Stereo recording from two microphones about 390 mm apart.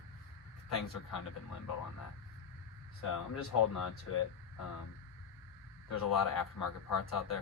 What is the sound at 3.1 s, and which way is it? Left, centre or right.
Speech, left.